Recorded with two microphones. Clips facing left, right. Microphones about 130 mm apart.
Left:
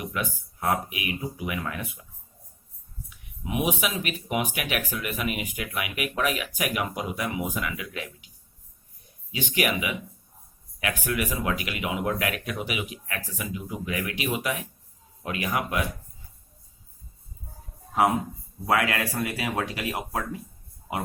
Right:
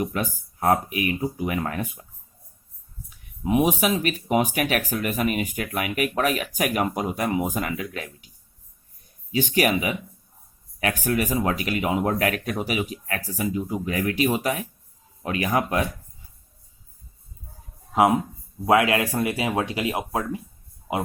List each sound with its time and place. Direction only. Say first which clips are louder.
0.0 s speech: right 5 dB; 40° right (ahead or behind)
3.1 s speech: right 9 dB; 40° right (ahead or behind)
9.3 s speech: right 5 dB; 40° right (ahead or behind)
18.6 s speech: right 5 dB; 20° right (ahead or behind)